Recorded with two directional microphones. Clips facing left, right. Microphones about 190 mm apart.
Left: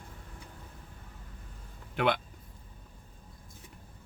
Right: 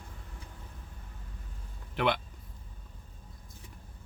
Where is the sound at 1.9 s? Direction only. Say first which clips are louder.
Left 1 dB; 50° left (ahead or behind).